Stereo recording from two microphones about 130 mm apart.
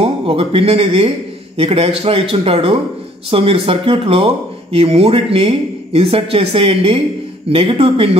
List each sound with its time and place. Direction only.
0.0 s speech: 45° right (ahead or behind)